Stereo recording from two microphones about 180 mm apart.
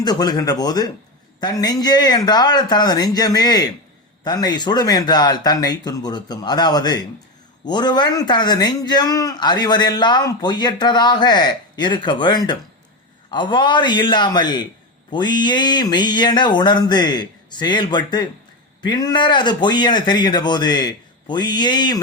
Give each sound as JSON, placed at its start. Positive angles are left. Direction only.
{"t": 0.0, "sound": "speech", "side_deg": 20}